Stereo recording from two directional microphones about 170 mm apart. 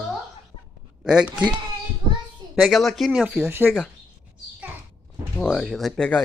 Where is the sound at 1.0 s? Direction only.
5° right (ahead or behind).